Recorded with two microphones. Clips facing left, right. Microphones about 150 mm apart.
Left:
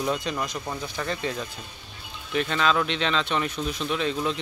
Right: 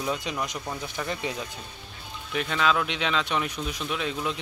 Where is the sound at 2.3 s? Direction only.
5° right (ahead or behind).